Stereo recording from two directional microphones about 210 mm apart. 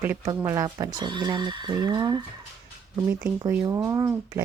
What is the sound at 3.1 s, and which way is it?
Speech, 5° right (ahead or behind).